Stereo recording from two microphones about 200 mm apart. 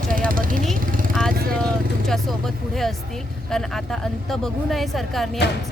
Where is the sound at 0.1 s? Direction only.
45° right (ahead or behind).